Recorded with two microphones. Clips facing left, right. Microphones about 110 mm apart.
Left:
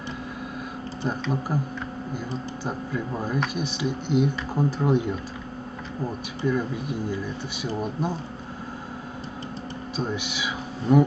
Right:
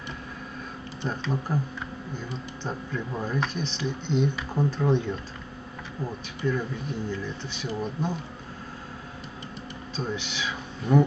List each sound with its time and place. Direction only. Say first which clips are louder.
1.0 s speech: left 3 dB; 30° left (ahead or behind)
1.5 s speech: left 2 dB; 10° left (ahead or behind)
6.4 s speech: left 3 dB; 10° left (ahead or behind)
9.9 s speech: left 2 dB; 15° left (ahead or behind)